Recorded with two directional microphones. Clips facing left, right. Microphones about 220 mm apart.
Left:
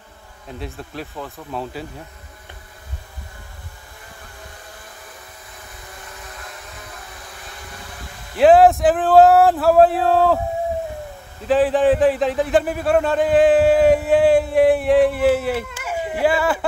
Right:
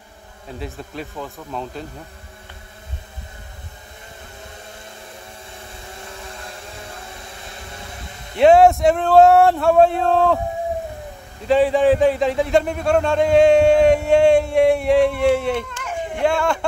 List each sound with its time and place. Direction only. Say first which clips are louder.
0.6 s a man's voice: right 1 dB; centre (ahead or behind)
5.6 s vehicle: right 1 dB; 25° right (ahead or behind)
8.4 s a man's voice: even; centre (ahead or behind)
11.4 s a man's voice: right 1 dB; centre (ahead or behind)